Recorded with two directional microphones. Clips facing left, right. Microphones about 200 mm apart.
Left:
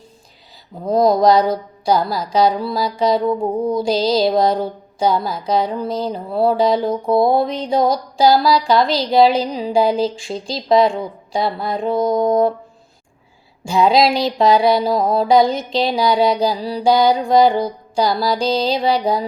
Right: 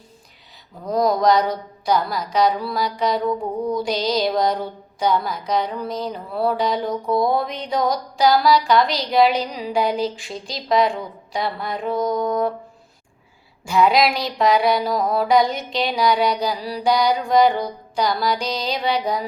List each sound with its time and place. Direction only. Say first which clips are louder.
0.9 s mantra: left 4 dB; 30° left (ahead or behind)
13.7 s mantra: left 3 dB; 25° left (ahead or behind)